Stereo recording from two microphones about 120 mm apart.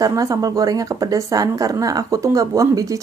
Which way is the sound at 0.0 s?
30° right (ahead or behind).